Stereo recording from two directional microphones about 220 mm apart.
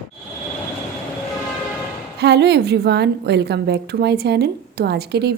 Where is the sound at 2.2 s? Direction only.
50° right (ahead or behind).